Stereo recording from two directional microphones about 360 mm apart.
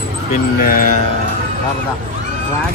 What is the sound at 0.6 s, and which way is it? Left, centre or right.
Speech, left.